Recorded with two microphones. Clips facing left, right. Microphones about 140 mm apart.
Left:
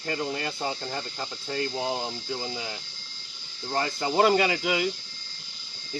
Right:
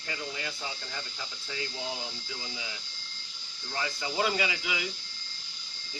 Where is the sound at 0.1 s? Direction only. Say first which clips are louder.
Left 8 dB; 50° left (ahead or behind).